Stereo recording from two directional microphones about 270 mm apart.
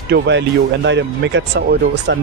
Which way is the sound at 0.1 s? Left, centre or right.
Right.